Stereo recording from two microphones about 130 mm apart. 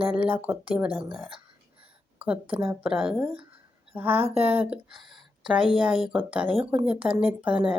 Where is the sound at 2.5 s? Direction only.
10° right (ahead or behind).